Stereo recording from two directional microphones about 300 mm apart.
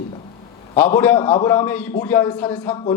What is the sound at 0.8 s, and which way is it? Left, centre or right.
A man's voice, centre.